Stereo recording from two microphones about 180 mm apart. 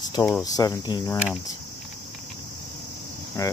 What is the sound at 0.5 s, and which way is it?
Cricket, 20° left (ahead or behind).